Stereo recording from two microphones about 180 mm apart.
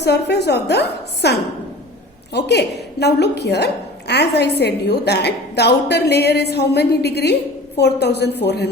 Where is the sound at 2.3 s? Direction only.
70° left (ahead or behind).